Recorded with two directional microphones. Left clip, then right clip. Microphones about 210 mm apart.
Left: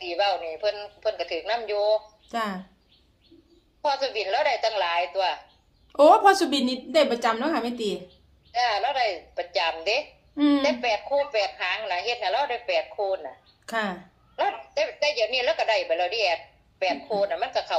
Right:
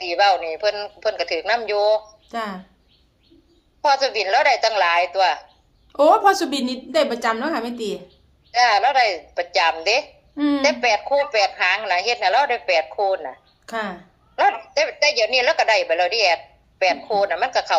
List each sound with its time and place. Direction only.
0.0 s a woman's voice: 50° right (ahead or behind)
2.2 s speech: 5° right (ahead or behind)
3.8 s a woman's voice: 50° right (ahead or behind)
5.9 s a woman's voice: 5° right (ahead or behind)
8.5 s a woman's voice: 50° right (ahead or behind)
10.3 s a woman's voice: 15° right (ahead or behind)
10.6 s a woman's voice: 50° right (ahead or behind)
13.7 s speech: 5° right (ahead or behind)
14.3 s a woman's voice: 50° right (ahead or behind)